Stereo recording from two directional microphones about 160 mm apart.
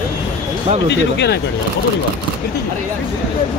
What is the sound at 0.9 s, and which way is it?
Speech, 90° left.